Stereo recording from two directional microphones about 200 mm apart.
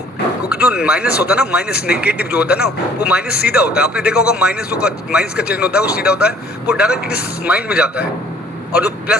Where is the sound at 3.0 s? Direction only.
5° right (ahead or behind).